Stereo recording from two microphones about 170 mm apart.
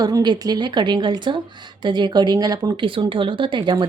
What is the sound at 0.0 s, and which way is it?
Speech, 25° right (ahead or behind).